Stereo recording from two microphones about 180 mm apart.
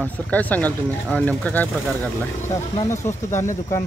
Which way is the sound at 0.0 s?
10° left (ahead or behind).